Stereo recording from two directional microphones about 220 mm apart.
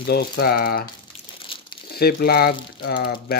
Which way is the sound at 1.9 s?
45° left (ahead or behind).